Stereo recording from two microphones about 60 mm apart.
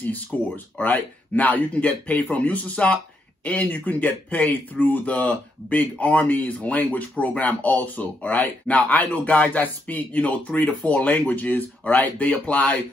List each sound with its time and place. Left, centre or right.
0.0 s speech: left